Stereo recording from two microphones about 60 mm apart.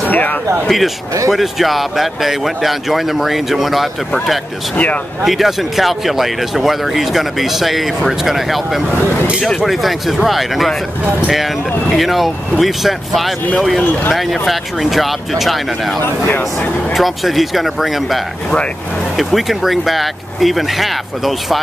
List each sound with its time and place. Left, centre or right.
0.1 s speech: left
0.7 s speech: centre